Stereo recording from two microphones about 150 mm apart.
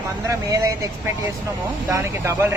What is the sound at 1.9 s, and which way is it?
Speech, 15° right (ahead or behind).